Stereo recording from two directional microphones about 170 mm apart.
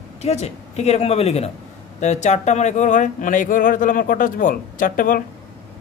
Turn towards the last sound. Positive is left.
turn(degrees=55)  # may be behind; listen again after turning